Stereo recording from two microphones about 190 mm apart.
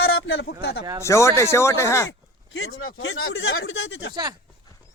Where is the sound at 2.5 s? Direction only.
90° left.